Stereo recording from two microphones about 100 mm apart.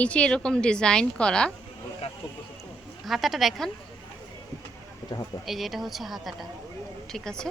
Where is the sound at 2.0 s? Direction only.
90° left.